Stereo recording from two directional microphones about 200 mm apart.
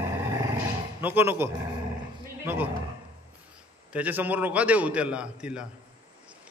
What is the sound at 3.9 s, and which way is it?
A man's voice, 10° right (ahead or behind).